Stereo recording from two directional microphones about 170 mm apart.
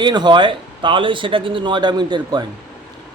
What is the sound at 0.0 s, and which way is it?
Speech, 25° right (ahead or behind).